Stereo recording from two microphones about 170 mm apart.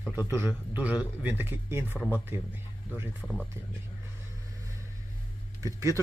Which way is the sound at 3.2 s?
5° left (ahead or behind).